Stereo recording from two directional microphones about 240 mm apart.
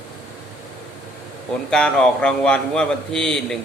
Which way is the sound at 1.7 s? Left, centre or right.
Centre.